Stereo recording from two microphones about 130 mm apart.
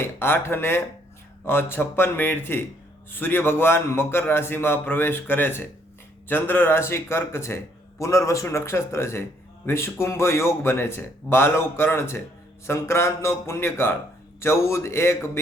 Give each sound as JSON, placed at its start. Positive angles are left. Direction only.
{"t": 0.2, "sound": "a man's voice", "side_deg": 15}